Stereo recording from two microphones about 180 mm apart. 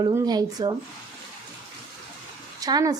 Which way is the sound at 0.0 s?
20° right (ahead or behind).